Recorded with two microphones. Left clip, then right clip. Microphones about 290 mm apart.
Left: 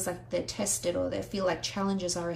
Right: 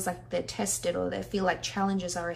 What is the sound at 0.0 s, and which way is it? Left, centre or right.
A woman's voice, left.